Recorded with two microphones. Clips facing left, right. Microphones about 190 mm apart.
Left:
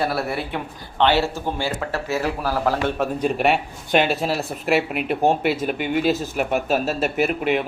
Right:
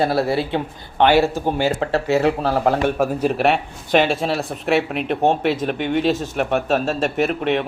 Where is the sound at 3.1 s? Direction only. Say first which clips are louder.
Right 2 dB; centre (ahead or behind).